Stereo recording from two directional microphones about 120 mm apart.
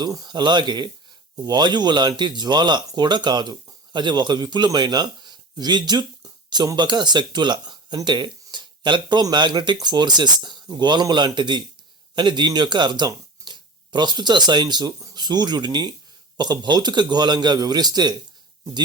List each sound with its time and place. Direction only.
0.0 s a man's voice: 30° right (ahead or behind)